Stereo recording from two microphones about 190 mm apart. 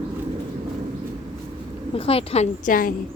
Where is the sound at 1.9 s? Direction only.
30° left (ahead or behind).